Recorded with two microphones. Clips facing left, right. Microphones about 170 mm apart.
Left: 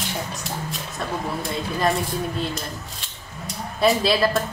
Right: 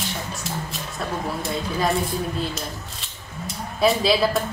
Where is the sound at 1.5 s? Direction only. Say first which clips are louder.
Left 1 dB; centre (ahead or behind).